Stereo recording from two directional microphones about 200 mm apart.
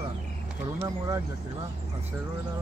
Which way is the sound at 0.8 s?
20° right (ahead or behind).